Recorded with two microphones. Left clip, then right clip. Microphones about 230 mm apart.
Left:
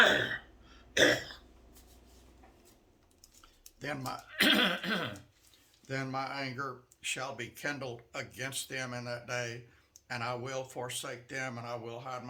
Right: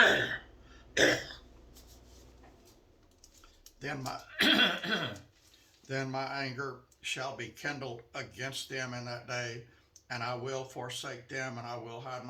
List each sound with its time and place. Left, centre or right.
0.9 s throat clearing: left
3.8 s a sound: left
5.9 s speech: left